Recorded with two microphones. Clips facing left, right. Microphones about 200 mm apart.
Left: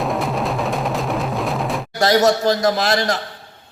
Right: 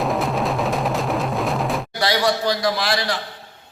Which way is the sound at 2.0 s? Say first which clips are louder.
Left 6 dB; 45° left (ahead or behind).